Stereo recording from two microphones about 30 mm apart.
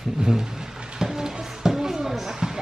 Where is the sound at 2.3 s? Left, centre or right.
Right.